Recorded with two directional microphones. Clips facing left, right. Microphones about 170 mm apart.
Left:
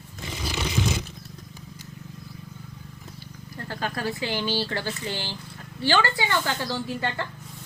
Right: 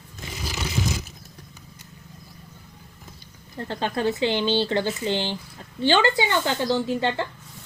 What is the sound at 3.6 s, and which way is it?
Speech, 25° right (ahead or behind).